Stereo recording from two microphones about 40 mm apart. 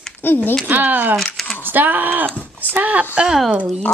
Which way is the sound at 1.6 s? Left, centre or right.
Right.